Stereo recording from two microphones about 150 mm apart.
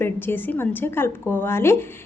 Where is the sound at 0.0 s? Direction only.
15° left (ahead or behind).